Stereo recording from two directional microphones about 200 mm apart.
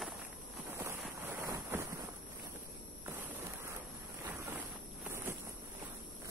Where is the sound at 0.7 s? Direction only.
15° right (ahead or behind).